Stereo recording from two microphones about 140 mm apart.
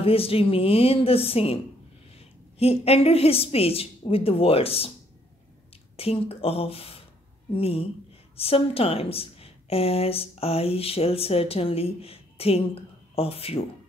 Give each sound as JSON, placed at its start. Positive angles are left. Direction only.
{"t": 0.0, "sound": "a woman's voice", "side_deg": 40}
{"t": 5.9, "sound": "a woman's voice", "side_deg": 45}